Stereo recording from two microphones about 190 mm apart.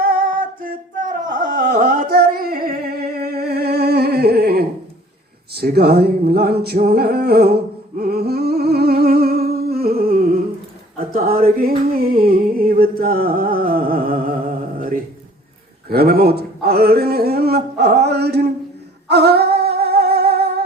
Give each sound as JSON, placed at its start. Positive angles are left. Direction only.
{"t": 0.0, "sound": "a sound", "side_deg": -50}
{"t": 11.9, "sound": "music", "side_deg": -50}
{"t": 15.9, "sound": "speech", "side_deg": -55}
{"t": 19.0, "sound": "humming", "side_deg": -60}